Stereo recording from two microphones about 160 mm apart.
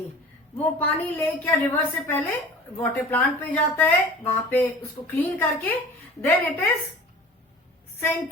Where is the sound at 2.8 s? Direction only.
10° left (ahead or behind).